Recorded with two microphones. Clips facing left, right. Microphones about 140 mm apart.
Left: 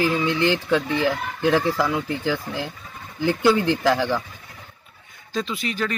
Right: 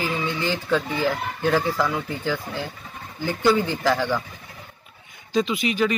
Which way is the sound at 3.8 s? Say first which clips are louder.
Left 1 dB; 10° left (ahead or behind).